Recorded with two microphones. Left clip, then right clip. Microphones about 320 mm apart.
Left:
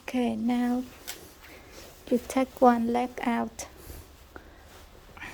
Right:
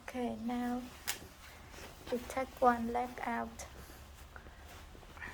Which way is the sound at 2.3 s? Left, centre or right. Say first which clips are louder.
Left 8 dB; left.